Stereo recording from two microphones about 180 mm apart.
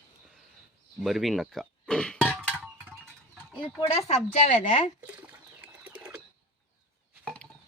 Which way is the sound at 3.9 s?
35° left (ahead or behind).